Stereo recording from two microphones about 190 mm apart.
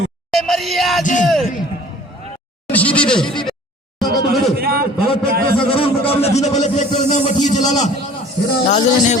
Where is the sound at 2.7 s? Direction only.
5° left (ahead or behind).